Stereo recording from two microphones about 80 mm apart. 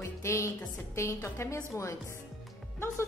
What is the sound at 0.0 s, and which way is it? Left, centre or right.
Music, left.